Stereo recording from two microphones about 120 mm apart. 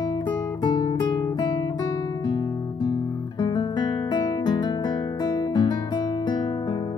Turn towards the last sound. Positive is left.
turn(degrees=35)  # may be behind; listen again after turning